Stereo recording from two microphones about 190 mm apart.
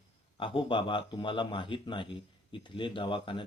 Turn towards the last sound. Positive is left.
turn(degrees=25)  # may be behind; listen again after turning